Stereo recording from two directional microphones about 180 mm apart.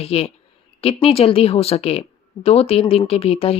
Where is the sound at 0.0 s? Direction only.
35° left (ahead or behind).